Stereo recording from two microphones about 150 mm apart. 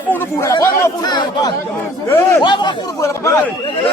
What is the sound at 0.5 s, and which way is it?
Speech, 25° left (ahead or behind).